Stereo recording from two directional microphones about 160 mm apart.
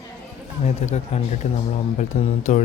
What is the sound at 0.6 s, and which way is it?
Speech, 45° left (ahead or behind).